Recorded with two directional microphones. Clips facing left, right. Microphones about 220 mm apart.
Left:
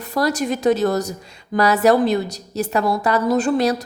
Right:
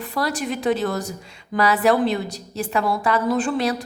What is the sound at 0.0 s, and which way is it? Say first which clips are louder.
A woman's voice: left 4 dB; 40° left (ahead or behind).